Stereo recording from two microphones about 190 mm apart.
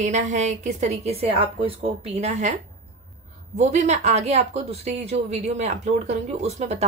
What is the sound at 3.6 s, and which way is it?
Speech, 40° right (ahead or behind).